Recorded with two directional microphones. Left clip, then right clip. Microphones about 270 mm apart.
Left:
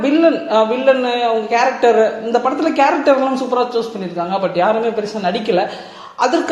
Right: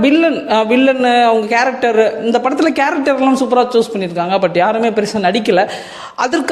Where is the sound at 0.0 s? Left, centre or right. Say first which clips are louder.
Right 1 dB; right.